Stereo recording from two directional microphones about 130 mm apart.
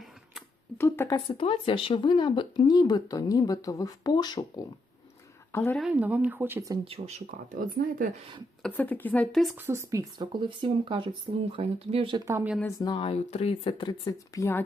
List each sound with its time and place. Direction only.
0.8 s speech: 20° left (ahead or behind)
1.1 s speech: 40° left (ahead or behind)
5.5 s speech: 15° left (ahead or behind)
5.9 s speech: 10° right (ahead or behind)
6.8 s speech: 50° right (ahead or behind)
7.5 s speech: 90° right
8.6 s speech: 10° left (ahead or behind)
9.6 s speech: 20° right (ahead or behind); by 12.1 s 50° right (ahead or behind)
12.1 s a woman's voice: 25° right (ahead or behind)
12.8 s speech: 40° left (ahead or behind)
14.1 s speech: 25° left (ahead or behind)